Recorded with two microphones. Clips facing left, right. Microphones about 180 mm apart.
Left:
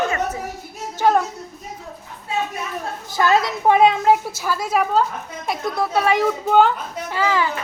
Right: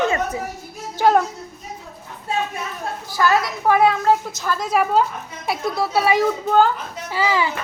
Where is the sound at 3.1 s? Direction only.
20° left (ahead or behind); by 7.5 s 10° right (ahead or behind).